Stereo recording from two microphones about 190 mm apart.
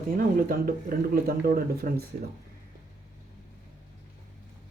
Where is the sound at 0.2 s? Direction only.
50° right (ahead or behind).